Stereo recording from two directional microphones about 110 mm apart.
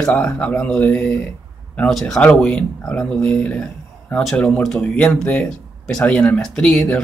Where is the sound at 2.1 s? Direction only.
10° left (ahead or behind).